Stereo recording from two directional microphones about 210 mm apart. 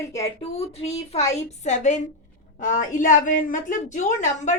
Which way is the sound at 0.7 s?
30° left (ahead or behind).